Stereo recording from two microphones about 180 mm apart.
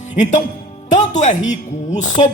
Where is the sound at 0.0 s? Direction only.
40° left (ahead or behind).